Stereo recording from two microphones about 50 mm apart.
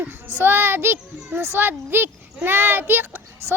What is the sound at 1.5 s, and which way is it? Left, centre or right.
A child's voice, right.